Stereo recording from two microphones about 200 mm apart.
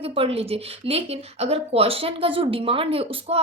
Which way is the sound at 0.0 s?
30° right (ahead or behind).